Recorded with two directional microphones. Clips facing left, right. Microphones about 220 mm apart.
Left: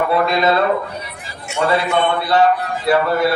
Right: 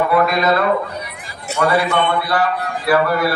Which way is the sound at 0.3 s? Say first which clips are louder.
Even; 25° left (ahead or behind).